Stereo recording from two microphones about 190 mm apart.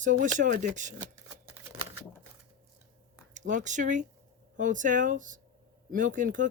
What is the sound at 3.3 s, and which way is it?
Speech, 40° right (ahead or behind).